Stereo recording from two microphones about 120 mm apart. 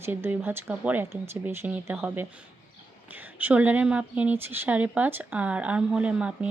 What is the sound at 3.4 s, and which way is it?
Speech, 15° right (ahead or behind).